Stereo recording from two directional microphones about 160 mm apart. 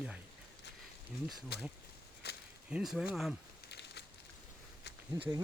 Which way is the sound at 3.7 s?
90° left.